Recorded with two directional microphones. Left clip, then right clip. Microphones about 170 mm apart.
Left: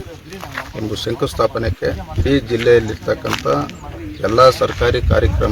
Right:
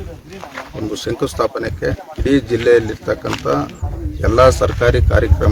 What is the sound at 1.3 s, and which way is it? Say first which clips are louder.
Speech: left 1 dB; 10° right (ahead or behind).